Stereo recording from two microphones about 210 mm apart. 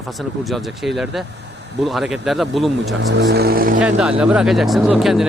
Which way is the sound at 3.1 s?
55° right (ahead or behind).